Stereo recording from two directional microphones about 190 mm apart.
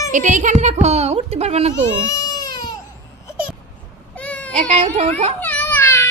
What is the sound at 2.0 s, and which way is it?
Baby cry, 20° left (ahead or behind).